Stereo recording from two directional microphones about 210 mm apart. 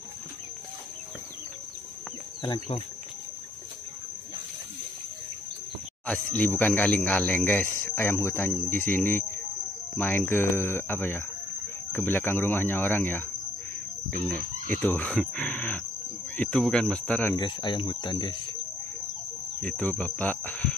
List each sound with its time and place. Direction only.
2.4 s speech: 20° left (ahead or behind)
6.3 s speech: 5° left (ahead or behind)
14.3 s speech: 10° left (ahead or behind)
17.4 s speech: 20° left (ahead or behind)
19.6 s speech: 5° left (ahead or behind)